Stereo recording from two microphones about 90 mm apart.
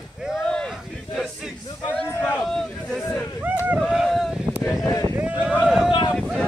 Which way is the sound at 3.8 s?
5° right (ahead or behind).